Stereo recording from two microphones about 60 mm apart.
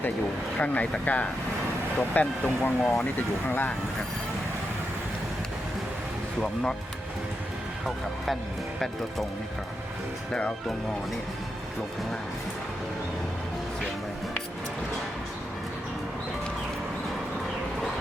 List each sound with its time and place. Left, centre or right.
0.5 s speech: left
6.4 s speech: centre